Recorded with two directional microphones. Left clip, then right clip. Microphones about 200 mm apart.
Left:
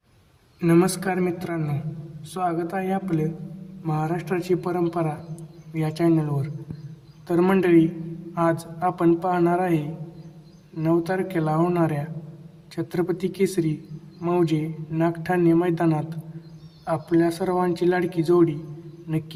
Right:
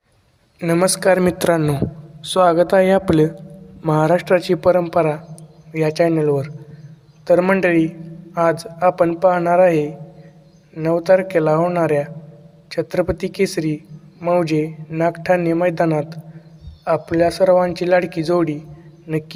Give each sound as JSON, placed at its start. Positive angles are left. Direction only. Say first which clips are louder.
{"t": 0.6, "sound": "speech", "louder": "right 5 dB", "side_deg": -30}